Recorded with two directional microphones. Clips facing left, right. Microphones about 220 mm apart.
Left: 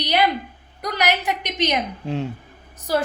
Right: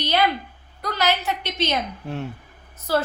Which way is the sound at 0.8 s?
15° left (ahead or behind).